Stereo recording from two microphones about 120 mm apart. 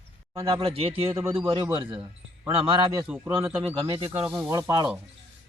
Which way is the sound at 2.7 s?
35° right (ahead or behind).